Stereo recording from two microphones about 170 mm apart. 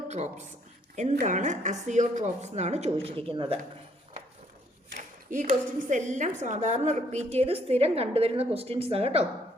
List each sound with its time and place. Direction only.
0.1 s a woman's voice: 40° right (ahead or behind)
4.9 s a woman's voice: 50° right (ahead or behind)